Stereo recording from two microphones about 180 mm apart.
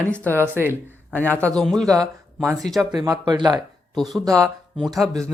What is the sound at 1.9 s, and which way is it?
Speech, 20° right (ahead or behind).